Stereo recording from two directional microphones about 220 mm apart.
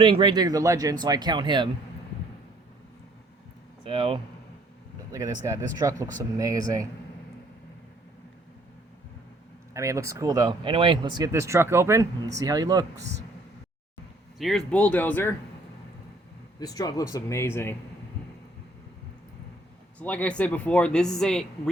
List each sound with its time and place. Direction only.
0.0 s speech: 25° right (ahead or behind)
3.8 s speech: 25° right (ahead or behind)
9.7 s speech: 15° right (ahead or behind)
14.3 s speech: centre (ahead or behind)
16.6 s speech: 15° left (ahead or behind)
20.0 s speech: 5° left (ahead or behind)